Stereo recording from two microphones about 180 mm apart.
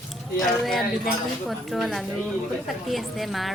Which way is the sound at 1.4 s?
Centre (ahead or behind).